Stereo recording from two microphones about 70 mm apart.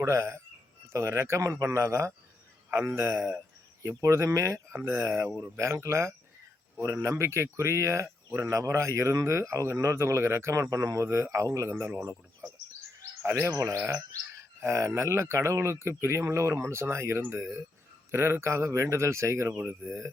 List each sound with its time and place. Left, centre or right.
0.0 s speech: right
3.2 s speech: right
13.2 s speech: right
19.5 s speech: right